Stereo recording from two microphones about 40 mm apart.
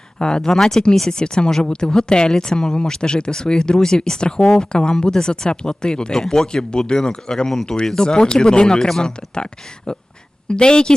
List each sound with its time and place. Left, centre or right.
0.2 s speech: centre
4.7 s speech: left